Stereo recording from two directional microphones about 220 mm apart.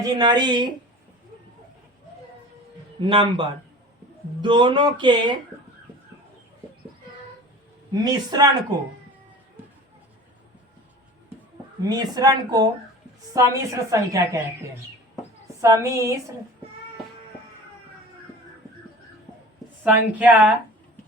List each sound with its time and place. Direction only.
0.1 s speech: 20° right (ahead or behind)
3.0 s speech: 25° right (ahead or behind)
7.9 s speech: 20° right (ahead or behind)
11.9 s a woman's voice: 20° right (ahead or behind)
15.6 s a woman's voice: 15° right (ahead or behind)
19.8 s a woman's voice: 5° right (ahead or behind)